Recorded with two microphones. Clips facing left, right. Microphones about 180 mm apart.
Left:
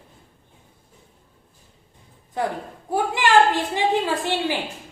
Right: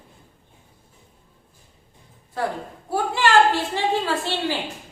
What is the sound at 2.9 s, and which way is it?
A woman's voice, 15° left (ahead or behind).